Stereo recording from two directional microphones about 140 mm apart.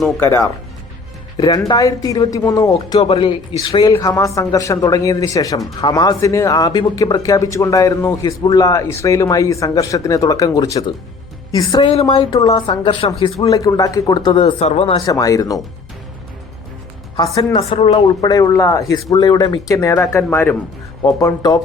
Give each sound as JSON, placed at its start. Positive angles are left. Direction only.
{"t": 0.2, "sound": "speech", "side_deg": 20}
{"t": 13.5, "sound": "speech", "side_deg": 25}
{"t": 15.0, "sound": "speech", "side_deg": 25}
{"t": 17.2, "sound": "speech", "side_deg": 30}
{"t": 17.6, "sound": "speech", "side_deg": 40}
{"t": 18.3, "sound": "speech", "side_deg": 25}